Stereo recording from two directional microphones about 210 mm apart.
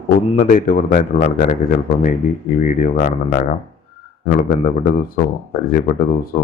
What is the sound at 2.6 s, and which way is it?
Speech, 40° left (ahead or behind).